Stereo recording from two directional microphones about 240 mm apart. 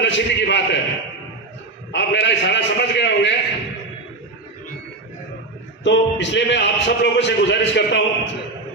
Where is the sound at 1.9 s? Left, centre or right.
Left.